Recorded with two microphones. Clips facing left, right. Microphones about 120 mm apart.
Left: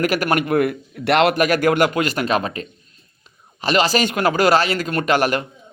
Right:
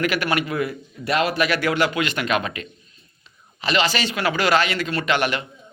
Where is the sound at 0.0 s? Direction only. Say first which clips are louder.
Left 3 dB; 40° left (ahead or behind); by 1.4 s 65° left (ahead or behind).